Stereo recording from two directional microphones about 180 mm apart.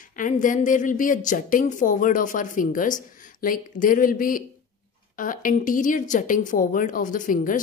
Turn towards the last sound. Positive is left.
turn(degrees=50)  # may be behind; listen again after turning